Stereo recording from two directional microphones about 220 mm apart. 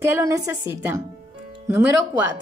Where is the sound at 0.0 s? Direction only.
15° right (ahead or behind).